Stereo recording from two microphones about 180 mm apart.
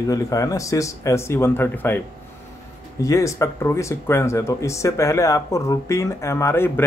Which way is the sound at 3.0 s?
15° left (ahead or behind).